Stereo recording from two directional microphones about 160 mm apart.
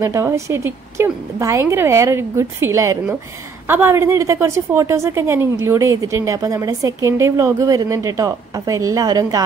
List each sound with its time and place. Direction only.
0.0 s a woman's voice: 15° right (ahead or behind)